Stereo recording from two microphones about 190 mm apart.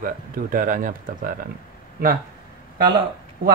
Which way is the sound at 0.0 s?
45° right (ahead or behind).